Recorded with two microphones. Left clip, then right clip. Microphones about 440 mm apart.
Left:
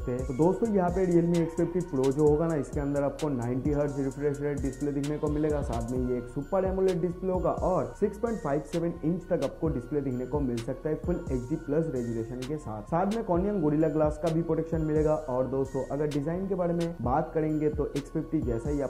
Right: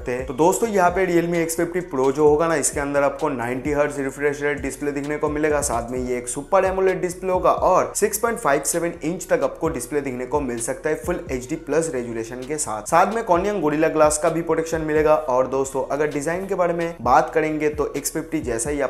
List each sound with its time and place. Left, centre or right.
0.7 s speech: centre